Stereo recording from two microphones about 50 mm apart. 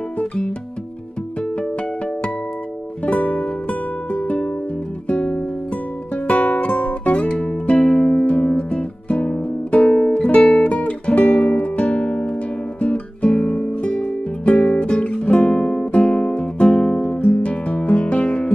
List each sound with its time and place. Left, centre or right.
3.1 s music: left